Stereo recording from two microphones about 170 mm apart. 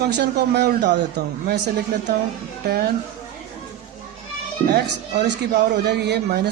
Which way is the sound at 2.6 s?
65° right (ahead or behind).